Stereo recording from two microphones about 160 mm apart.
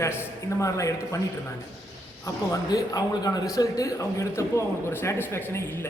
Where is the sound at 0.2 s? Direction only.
20° left (ahead or behind).